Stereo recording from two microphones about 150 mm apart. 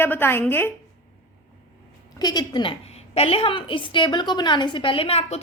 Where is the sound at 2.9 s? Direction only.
45° left (ahead or behind).